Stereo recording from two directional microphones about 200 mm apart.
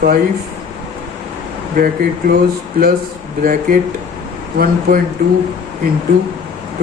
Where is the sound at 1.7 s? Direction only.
45° right (ahead or behind).